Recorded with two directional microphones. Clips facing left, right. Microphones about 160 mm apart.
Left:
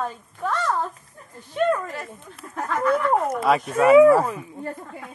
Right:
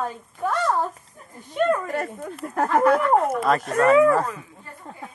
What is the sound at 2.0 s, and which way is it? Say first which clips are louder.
Speech: right 8 dB; 55° right (ahead or behind).